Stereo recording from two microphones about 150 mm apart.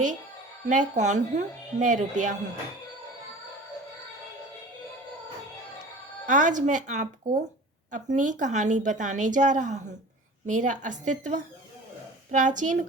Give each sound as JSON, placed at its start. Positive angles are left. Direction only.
{"t": 0.7, "sound": "a woman's voice", "side_deg": -55}
{"t": 6.2, "sound": "a woman's voice", "side_deg": -55}